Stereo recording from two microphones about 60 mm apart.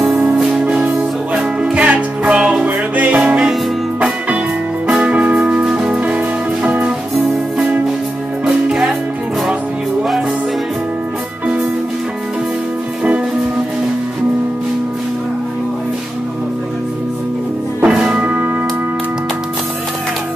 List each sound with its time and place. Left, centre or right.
0.0 s music: centre
4.8 s music: centre
17.8 s music: centre